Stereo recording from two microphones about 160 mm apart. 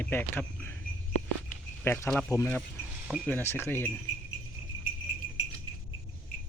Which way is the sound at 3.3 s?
15° left (ahead or behind).